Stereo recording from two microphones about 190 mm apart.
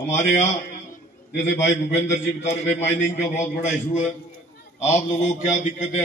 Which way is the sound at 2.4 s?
35° left (ahead or behind).